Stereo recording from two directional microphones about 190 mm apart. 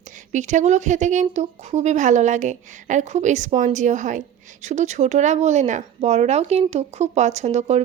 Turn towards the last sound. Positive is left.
turn(degrees=-35)  # may be behind; listen again after turning